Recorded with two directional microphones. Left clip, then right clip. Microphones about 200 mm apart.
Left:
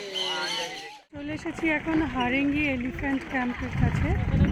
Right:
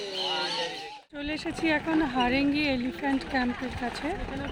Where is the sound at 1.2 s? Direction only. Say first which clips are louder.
Right 1 dB; 10° left (ahead or behind).